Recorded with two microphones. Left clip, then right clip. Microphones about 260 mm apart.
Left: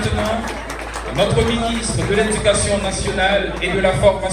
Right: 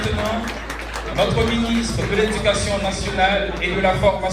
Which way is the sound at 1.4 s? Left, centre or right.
Centre.